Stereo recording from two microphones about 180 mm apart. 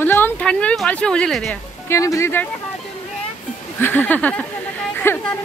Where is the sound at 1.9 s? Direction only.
15° left (ahead or behind).